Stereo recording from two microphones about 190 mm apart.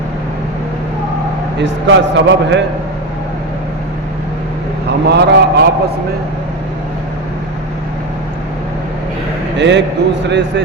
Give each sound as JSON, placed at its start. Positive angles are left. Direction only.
{"t": 1.5, "sound": "a man's voice", "side_deg": -70}
{"t": 5.0, "sound": "speech", "side_deg": -60}
{"t": 9.6, "sound": "a man's voice", "side_deg": -70}